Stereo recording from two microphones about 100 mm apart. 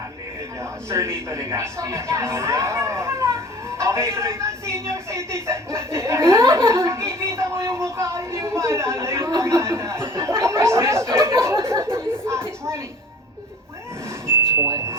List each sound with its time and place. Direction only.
0.6 s a man's voice: 25° right (ahead or behind)
11.4 s a sound: 30° right (ahead or behind)
12.2 s speech: 25° right (ahead or behind)
14.3 s vehicle: 30° right (ahead or behind)